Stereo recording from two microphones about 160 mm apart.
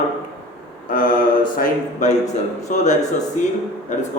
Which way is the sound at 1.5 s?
55° left (ahead or behind).